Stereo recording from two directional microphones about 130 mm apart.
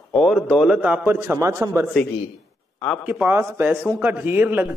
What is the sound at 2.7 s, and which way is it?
Speech, 10° left (ahead or behind).